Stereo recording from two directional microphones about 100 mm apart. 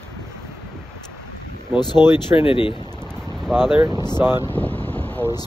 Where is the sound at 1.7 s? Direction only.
50° left (ahead or behind).